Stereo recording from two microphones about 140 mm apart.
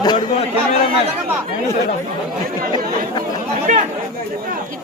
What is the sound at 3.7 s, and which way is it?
Speech, 65° right (ahead or behind).